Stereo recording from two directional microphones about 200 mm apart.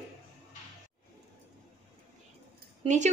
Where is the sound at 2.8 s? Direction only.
35° right (ahead or behind).